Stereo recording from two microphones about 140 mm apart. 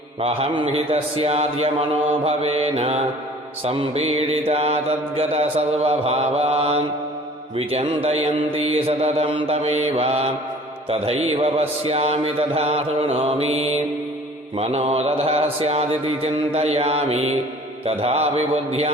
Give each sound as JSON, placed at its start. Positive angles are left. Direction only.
{"t": 0.2, "sound": "mantra", "side_deg": -45}
{"t": 9.6, "sound": "mantra", "side_deg": -50}